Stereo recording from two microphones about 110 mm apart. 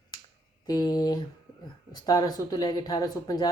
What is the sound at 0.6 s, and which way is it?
Speech, 35° left (ahead or behind).